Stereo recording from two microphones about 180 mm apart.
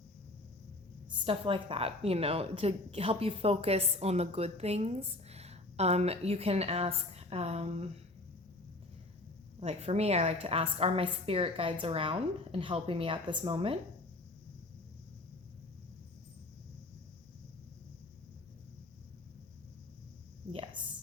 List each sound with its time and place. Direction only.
1.2 s a woman's voice: 30° right (ahead or behind)
9.6 s a woman's voice: 35° right (ahead or behind)